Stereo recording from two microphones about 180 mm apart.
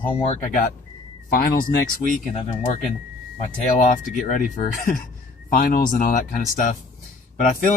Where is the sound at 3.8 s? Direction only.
45° left (ahead or behind).